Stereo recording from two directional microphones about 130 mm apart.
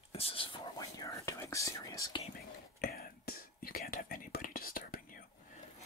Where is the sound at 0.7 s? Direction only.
25° left (ahead or behind).